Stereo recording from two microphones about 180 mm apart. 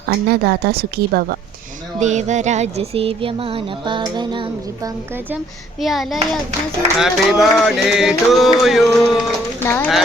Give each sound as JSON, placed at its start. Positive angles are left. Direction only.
{"t": 0.0, "sound": "speech", "side_deg": -60}
{"t": 2.0, "sound": "a sound", "side_deg": -40}
{"t": 5.8, "sound": "mantra", "side_deg": 0}
{"t": 9.6, "sound": "speech", "side_deg": 10}